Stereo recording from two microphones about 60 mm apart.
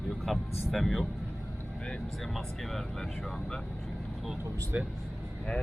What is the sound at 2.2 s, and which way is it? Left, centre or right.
Speech, centre.